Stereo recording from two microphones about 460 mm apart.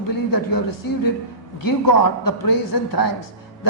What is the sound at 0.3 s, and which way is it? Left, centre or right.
Speech, left.